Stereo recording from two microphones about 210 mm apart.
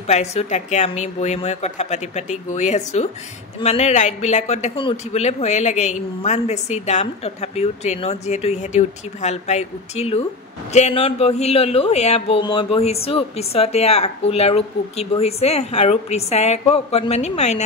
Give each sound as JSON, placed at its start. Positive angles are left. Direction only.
{"t": 0.0, "sound": "speech", "side_deg": 30}